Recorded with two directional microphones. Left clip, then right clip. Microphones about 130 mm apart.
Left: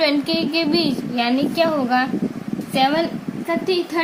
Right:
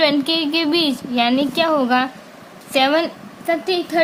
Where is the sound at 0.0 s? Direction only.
60° right (ahead or behind).